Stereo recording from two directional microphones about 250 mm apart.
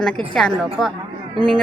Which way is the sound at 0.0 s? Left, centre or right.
Centre.